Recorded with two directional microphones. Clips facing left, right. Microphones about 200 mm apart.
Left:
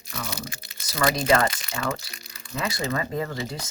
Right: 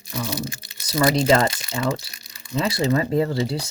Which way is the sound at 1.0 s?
25° right (ahead or behind).